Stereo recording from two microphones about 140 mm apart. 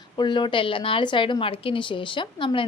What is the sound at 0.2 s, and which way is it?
A woman's voice, 35° left (ahead or behind).